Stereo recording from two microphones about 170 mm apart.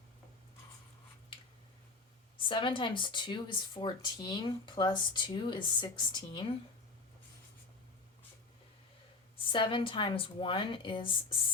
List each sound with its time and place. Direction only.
2.4 s speech: 30° left (ahead or behind)
9.5 s speech: 30° left (ahead or behind)